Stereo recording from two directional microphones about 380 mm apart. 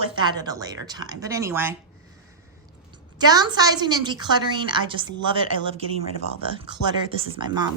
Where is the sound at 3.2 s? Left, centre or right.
Centre.